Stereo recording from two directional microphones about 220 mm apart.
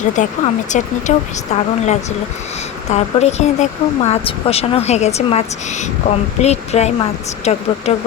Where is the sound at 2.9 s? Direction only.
30° left (ahead or behind).